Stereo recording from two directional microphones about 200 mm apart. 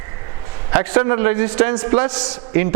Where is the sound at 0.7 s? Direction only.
10° right (ahead or behind).